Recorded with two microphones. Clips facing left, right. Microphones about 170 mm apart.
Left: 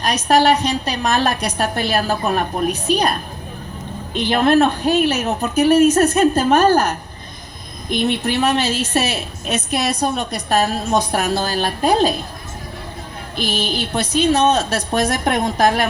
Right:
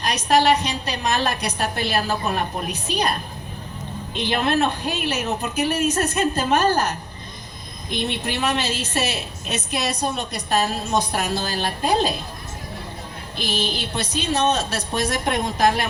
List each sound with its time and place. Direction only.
0.3 s a woman's voice: 50° left (ahead or behind)
4.1 s a woman's voice: 50° left (ahead or behind)
13.3 s a woman's voice: 50° left (ahead or behind)